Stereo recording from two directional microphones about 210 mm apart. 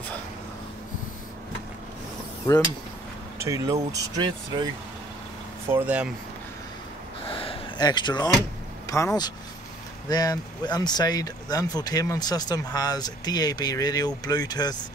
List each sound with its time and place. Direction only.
3.4 s speech: 15° right (ahead or behind)
5.7 s speech: 10° right (ahead or behind)
7.2 s a sound: 25° left (ahead or behind)
8.8 s speech: 15° left (ahead or behind)